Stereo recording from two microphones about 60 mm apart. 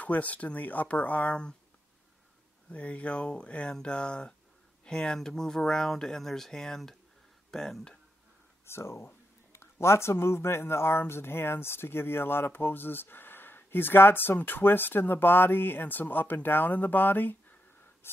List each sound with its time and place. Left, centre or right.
0.0 s speech: left
2.7 s speech: left
8.6 s speech: left
18.0 s crow: left